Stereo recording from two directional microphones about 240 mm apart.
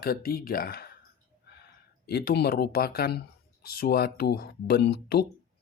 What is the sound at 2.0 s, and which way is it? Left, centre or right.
Speech, left.